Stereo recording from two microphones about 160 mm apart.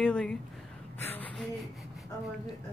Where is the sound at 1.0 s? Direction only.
10° left (ahead or behind).